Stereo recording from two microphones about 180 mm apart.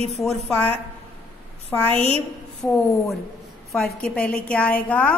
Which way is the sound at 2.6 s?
10° left (ahead or behind).